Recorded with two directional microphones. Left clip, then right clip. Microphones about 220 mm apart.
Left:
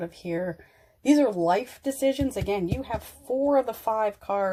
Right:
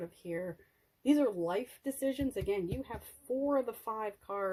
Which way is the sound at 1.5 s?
25° right (ahead or behind).